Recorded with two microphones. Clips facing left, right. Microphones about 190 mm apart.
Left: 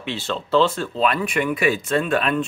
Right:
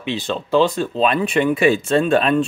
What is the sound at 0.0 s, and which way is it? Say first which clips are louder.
Speech: right 3 dB; 15° right (ahead or behind).